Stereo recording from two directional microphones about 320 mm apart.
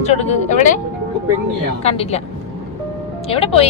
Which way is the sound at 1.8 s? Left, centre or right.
Centre.